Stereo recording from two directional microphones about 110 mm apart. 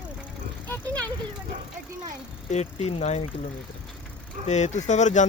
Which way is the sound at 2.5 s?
80° left.